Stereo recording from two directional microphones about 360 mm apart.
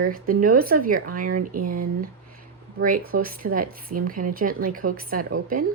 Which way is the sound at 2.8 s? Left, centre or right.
Right.